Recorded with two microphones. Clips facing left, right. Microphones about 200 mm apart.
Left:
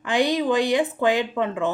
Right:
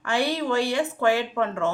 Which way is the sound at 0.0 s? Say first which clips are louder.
Left 4 dB; 15° left (ahead or behind).